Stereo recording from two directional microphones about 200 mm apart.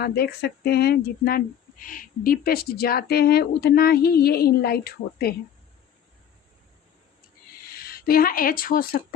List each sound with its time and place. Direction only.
0.0 s speech: 50° left (ahead or behind)
7.9 s speech: 50° left (ahead or behind)